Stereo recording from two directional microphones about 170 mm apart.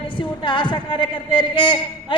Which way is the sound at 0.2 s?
30° left (ahead or behind).